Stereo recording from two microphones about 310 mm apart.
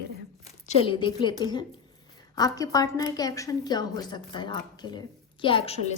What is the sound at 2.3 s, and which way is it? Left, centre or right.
A woman's voice, centre.